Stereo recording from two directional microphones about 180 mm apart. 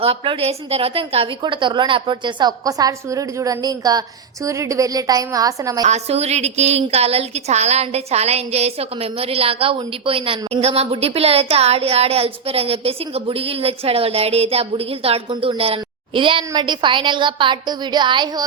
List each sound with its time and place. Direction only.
0.0 s a woman's voice: 30° right (ahead or behind)
5.8 s a woman's voice: 35° right (ahead or behind)